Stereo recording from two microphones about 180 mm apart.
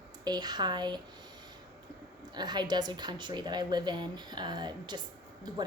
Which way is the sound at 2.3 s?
25° right (ahead or behind).